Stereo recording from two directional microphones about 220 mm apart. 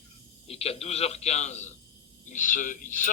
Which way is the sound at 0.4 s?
25° left (ahead or behind).